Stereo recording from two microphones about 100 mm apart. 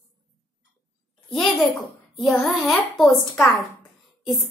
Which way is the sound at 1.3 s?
Centre (ahead or behind).